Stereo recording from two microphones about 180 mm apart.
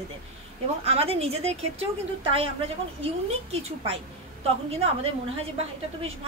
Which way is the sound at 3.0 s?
35° right (ahead or behind).